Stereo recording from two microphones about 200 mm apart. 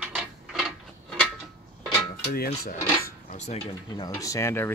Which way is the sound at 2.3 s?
50° left (ahead or behind).